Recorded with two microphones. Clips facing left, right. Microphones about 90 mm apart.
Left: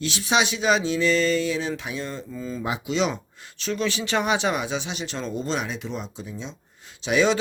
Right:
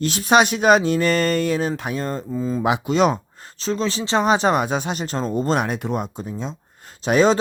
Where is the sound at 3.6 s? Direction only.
30° right (ahead or behind).